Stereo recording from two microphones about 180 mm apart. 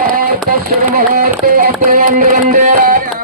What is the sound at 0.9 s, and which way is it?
Music, 50° right (ahead or behind).